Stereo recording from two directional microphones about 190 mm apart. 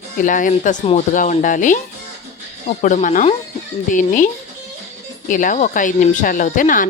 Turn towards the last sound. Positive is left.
turn(degrees=45)  # may be behind; listen again after turning